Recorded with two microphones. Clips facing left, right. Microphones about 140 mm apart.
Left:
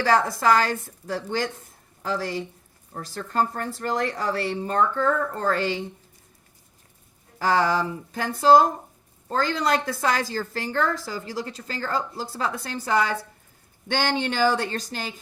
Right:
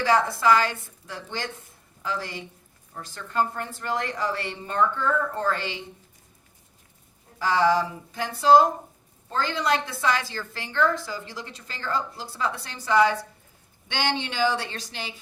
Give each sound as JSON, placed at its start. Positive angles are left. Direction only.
{"t": 0.0, "sound": "a woman's voice", "side_deg": 45}
{"t": 7.3, "sound": "a woman's voice", "side_deg": 45}